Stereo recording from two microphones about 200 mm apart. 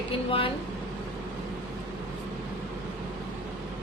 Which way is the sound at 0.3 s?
25° left (ahead or behind).